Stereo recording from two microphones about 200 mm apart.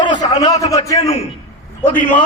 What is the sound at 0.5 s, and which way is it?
Speech, 30° left (ahead or behind).